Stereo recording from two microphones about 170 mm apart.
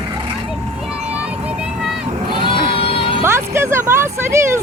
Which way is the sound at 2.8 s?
30° left (ahead or behind).